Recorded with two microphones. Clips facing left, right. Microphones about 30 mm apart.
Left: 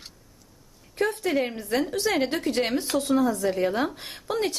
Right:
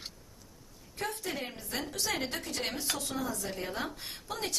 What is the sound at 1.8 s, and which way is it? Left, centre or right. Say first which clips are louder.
A woman's voice: left 7 dB; left.